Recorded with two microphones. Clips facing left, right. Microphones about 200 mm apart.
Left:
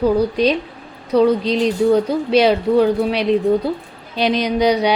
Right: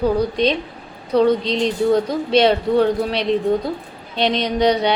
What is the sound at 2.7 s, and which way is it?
Speech, 30° right (ahead or behind).